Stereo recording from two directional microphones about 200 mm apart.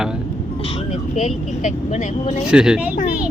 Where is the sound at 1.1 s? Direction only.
35° left (ahead or behind).